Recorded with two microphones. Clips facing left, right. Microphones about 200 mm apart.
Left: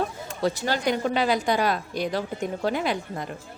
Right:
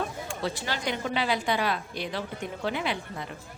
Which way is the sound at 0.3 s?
40° left (ahead or behind).